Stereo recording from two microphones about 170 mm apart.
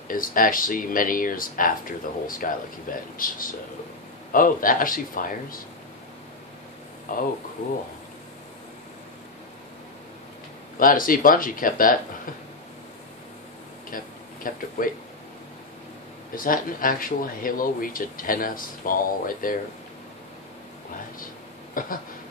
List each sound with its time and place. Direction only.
0.1 s speech: 55° left (ahead or behind)
7.1 s speech: 55° left (ahead or behind)
10.8 s speech: 55° left (ahead or behind)
13.8 s speech: 55° left (ahead or behind)
16.3 s speech: 55° left (ahead or behind)
21.8 s speech: 55° left (ahead or behind)